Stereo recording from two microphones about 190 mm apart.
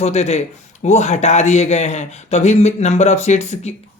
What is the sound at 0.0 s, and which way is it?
Speech, 35° left (ahead or behind).